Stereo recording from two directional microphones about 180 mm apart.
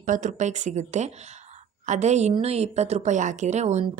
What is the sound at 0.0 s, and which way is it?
A woman's voice, 45° right (ahead or behind).